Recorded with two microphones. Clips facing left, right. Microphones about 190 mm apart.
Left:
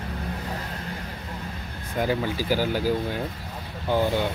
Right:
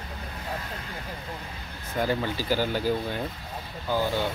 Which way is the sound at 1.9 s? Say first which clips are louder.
Left 2 dB; 5° left (ahead or behind).